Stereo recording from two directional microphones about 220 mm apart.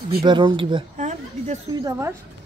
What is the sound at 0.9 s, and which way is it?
Speech, 35° right (ahead or behind).